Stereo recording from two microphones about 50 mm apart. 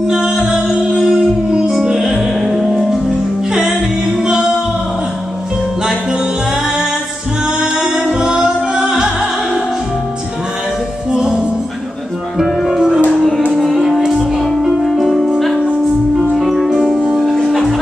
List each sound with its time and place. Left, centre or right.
0.1 s music: centre
0.9 s singing: centre
1.7 s music: centre
7.6 s music: centre
11.1 s music: centre